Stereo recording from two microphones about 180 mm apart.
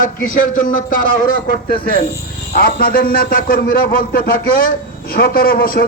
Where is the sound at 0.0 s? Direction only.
50° left (ahead or behind).